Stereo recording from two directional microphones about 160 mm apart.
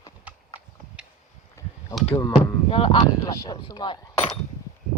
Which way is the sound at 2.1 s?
20° left (ahead or behind).